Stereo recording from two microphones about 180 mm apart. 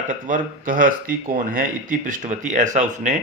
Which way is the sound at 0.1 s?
50° right (ahead or behind).